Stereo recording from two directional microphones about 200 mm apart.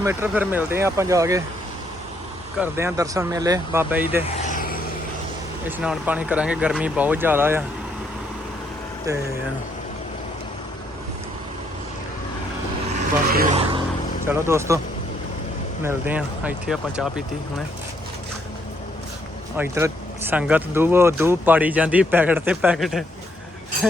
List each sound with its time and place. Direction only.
0.0 s speech: 10° right (ahead or behind)
2.6 s speech: 15° right (ahead or behind)
4.4 s vehicle: 40° left (ahead or behind)
5.6 s speech: 5° right (ahead or behind)
13.3 s vehicle: 45° right (ahead or behind)
14.3 s speech: 15° right (ahead or behind)
15.8 s speech: 10° right (ahead or behind)
19.5 s speech: 10° right (ahead or behind)